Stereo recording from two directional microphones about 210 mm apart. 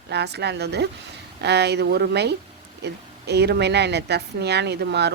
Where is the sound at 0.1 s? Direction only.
50° right (ahead or behind).